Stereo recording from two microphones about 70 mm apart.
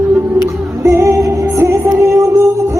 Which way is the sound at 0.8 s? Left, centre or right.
Right.